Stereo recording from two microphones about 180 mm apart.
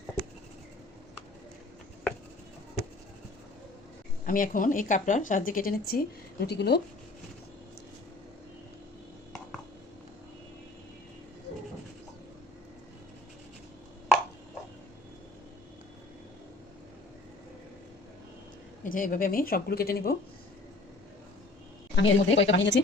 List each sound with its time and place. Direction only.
4.3 s speech: 50° left (ahead or behind); by 6.8 s 65° left (ahead or behind)
18.9 s speech: 50° left (ahead or behind)
21.9 s speech: 90° left